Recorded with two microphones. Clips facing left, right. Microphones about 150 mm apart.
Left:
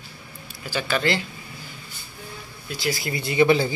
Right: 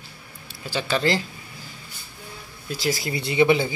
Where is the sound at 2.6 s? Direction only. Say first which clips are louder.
Right 1 dB; 40° right (ahead or behind); by 3.7 s 20° right (ahead or behind).